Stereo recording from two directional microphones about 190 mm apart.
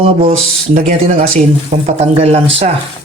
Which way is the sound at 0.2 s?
50° right (ahead or behind).